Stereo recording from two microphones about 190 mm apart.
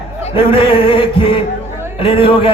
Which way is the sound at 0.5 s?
30° left (ahead or behind).